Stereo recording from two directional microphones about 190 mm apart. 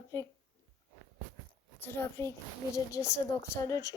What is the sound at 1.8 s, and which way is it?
A woman's voice, 15° left (ahead or behind).